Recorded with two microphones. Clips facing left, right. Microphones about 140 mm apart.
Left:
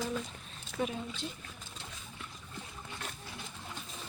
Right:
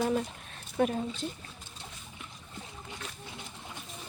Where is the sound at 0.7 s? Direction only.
50° right (ahead or behind).